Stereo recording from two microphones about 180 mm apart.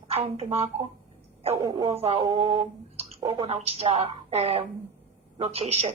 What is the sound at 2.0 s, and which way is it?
Speech, 35° right (ahead or behind).